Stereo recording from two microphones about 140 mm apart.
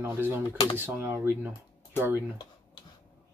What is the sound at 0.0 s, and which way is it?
Speech, 15° right (ahead or behind).